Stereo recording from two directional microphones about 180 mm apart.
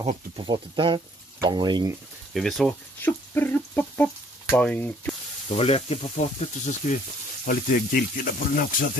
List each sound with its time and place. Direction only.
0.0 s speech: 35° right (ahead or behind)
2.3 s speech: centre (ahead or behind)
5.5 s speech: 35° left (ahead or behind)
7.4 s speech: 50° left (ahead or behind)